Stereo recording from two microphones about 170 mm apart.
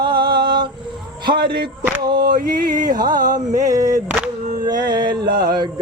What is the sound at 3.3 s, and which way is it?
Music, 20° right (ahead or behind).